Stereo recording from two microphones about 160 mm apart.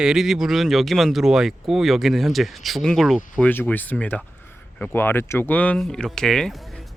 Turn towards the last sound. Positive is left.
turn(degrees=0)  # may be behind; listen again after turning